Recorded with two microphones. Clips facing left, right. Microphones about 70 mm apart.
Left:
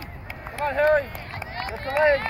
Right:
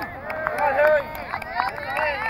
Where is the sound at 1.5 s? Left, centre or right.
Right.